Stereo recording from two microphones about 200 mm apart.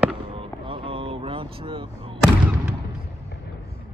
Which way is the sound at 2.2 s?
5° right (ahead or behind).